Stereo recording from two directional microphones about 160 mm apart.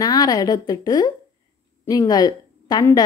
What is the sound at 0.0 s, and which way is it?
A woman's voice, 25° left (ahead or behind).